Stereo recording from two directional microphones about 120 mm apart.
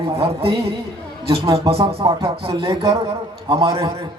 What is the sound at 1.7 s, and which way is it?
Speech, 55° right (ahead or behind).